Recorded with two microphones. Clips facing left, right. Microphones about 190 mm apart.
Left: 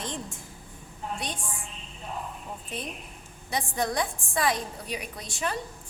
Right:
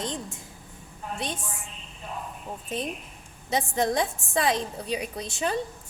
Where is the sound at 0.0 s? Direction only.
20° right (ahead or behind).